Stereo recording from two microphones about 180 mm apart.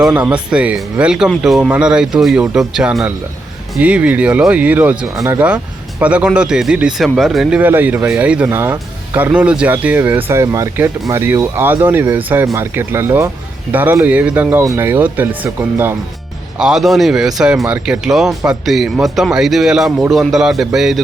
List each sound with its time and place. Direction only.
0.0 s speech: 5° right (ahead or behind)
16.6 s speech: 5° right (ahead or behind)